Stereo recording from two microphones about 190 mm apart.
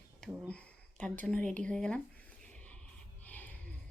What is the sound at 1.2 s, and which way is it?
Speech, 5° left (ahead or behind).